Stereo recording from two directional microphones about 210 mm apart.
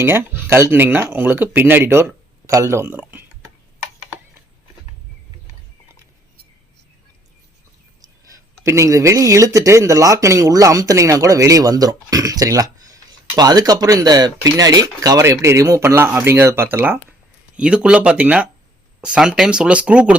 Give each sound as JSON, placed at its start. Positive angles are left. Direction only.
{"t": 0.0, "sound": "speech", "side_deg": -10}
{"t": 8.3, "sound": "speech", "side_deg": -15}